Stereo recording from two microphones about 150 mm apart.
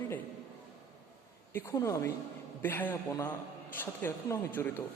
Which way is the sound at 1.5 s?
20° left (ahead or behind).